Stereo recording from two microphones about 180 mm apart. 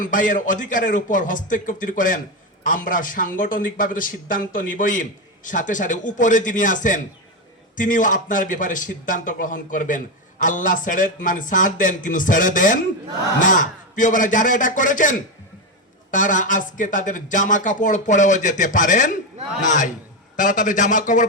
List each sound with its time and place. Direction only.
0.0 s a man's voice: 45° left (ahead or behind)
16.1 s a man's voice: 45° left (ahead or behind)